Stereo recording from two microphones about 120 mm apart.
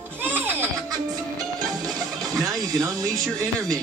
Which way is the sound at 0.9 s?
30° right (ahead or behind).